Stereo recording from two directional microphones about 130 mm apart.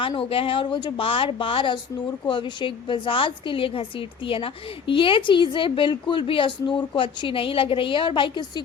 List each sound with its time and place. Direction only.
0.0 s a woman's voice: 45° left (ahead or behind)